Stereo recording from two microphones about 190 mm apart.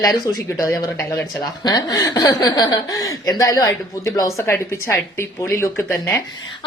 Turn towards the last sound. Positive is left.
turn(degrees=10)  # may be behind; listen again after turning